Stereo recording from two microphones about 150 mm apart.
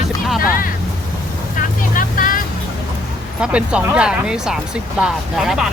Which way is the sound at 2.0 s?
65° left (ahead or behind).